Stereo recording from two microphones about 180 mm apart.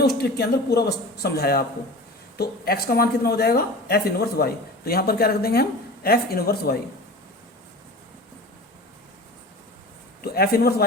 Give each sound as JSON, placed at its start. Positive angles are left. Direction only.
{"t": 0.0, "sound": "a woman's voice", "side_deg": 65}
{"t": 10.2, "sound": "a woman's voice", "side_deg": 60}